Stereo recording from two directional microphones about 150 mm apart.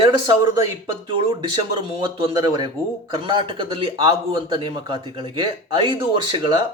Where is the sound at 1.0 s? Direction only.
35° right (ahead or behind).